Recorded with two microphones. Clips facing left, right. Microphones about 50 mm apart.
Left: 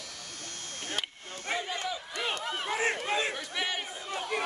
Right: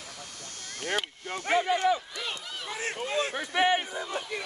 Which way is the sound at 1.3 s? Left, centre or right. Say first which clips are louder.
Right 9 dB; right.